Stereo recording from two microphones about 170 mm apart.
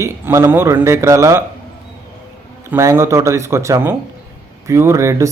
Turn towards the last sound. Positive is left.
turn(degrees=-20)  # may be behind; listen again after turning